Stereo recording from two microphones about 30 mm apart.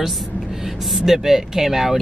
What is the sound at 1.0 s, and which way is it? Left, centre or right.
Speech, centre.